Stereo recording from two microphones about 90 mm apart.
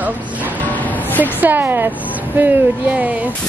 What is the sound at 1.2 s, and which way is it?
A woman's voice, 20° right (ahead or behind).